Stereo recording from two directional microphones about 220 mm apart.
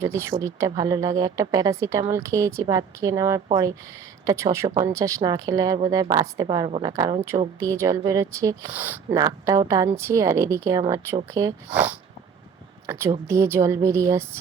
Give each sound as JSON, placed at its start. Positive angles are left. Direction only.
{"t": 0.0, "sound": "speech", "side_deg": -15}